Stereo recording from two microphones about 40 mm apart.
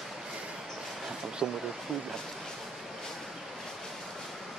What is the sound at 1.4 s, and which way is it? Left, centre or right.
Speech, centre.